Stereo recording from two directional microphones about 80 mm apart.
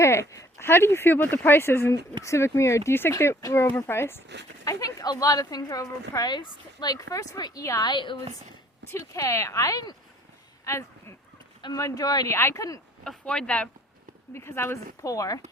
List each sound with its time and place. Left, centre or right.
0.0 s speech: left
4.6 s a woman's voice: left
6.3 s speech: left
7.8 s a woman's voice: left
8.9 s speech: left
10.7 s a woman's voice: left
12.3 s speech: left
13.1 s speech: centre
14.3 s speech: left
15.0 s a woman's voice: left